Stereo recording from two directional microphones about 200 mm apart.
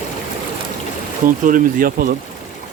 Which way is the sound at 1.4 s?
40° right (ahead or behind).